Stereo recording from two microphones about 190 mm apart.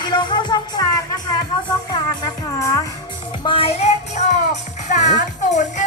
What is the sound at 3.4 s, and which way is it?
Music, 30° left (ahead or behind).